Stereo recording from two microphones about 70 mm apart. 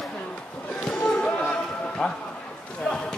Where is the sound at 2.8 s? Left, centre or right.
Centre.